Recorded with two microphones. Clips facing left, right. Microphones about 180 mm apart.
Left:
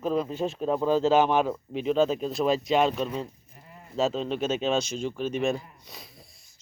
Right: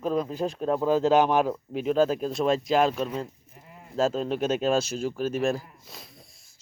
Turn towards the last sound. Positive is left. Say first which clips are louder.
# even
turn(degrees=0)  # may be behind; listen again after turning